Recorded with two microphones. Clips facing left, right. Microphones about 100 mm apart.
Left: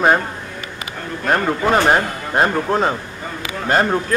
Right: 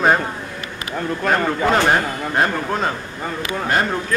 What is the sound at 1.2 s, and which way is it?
A man's voice, 15° left (ahead or behind).